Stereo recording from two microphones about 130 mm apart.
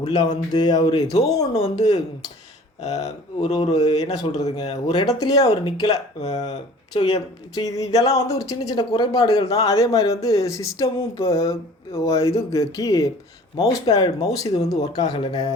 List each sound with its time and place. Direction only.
0.3 s speech: 30° left (ahead or behind)
2.8 s speech: 60° left (ahead or behind)
3.8 s speech: 30° left (ahead or behind)
5.9 s speech: 60° left (ahead or behind)
6.9 s speech: 30° left (ahead or behind)